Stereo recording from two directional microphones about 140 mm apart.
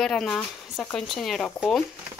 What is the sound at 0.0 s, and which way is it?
Speech, 5° left (ahead or behind).